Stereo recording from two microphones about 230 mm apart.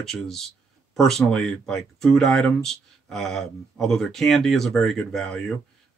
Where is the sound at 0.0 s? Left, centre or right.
Centre.